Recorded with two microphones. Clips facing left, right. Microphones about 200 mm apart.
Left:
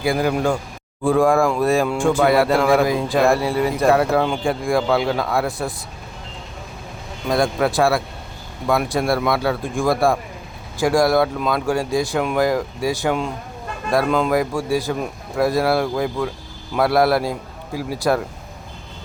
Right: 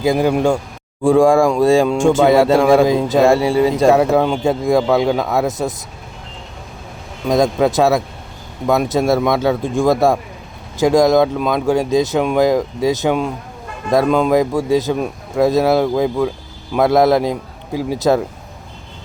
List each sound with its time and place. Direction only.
0.0 s speech: 20° right (ahead or behind)
7.3 s speech: 20° right (ahead or behind)